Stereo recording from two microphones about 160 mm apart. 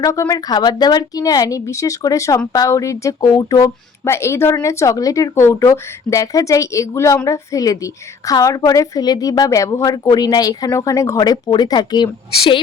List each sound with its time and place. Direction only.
0.0 s speech: 20° left (ahead or behind)